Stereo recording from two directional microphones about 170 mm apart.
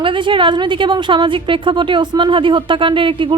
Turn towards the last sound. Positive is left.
turn(degrees=-30)  # may be behind; listen again after turning